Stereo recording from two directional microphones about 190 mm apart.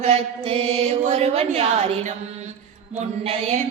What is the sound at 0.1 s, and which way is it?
Mantra, 30° right (ahead or behind).